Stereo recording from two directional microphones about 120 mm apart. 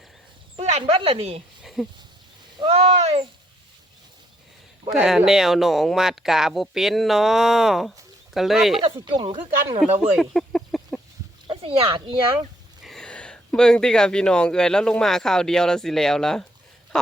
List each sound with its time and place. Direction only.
0.5 s speech: 65° right (ahead or behind)
1.6 s a sound: centre (ahead or behind)
2.6 s speech: 55° right (ahead or behind)
4.9 s speech: 5° right (ahead or behind)
8.8 s speech: 50° right (ahead or behind)
9.8 s speech: centre (ahead or behind)
10.2 s a sound: 5° left (ahead or behind)
11.4 s a child's voice: 45° right (ahead or behind)
12.8 s speech: 5° left (ahead or behind)
16.9 s a sound: 5° left (ahead or behind)